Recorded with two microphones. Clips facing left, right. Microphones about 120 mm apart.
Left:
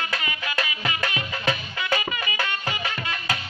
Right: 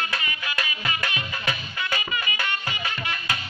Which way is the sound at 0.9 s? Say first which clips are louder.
Left 2 dB; 90° left.